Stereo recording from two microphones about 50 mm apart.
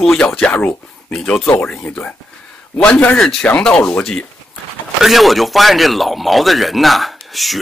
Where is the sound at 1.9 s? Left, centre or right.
Left.